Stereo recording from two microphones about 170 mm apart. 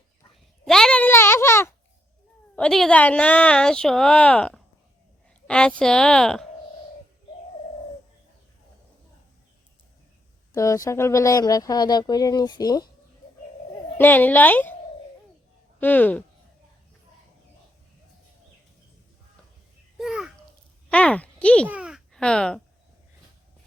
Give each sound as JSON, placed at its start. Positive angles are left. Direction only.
{"t": 0.6, "sound": "a sound", "side_deg": 5}
{"t": 2.6, "sound": "speech", "side_deg": 0}
{"t": 10.5, "sound": "speech", "side_deg": 20}
{"t": 13.7, "sound": "speech", "side_deg": 10}
{"t": 15.8, "sound": "speech", "side_deg": 10}
{"t": 20.0, "sound": "a sound", "side_deg": 0}
{"t": 20.9, "sound": "a child's voice", "side_deg": 5}
{"t": 21.7, "sound": "a child's voice", "side_deg": -5}